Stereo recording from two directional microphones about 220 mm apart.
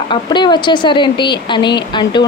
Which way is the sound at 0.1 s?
20° left (ahead or behind).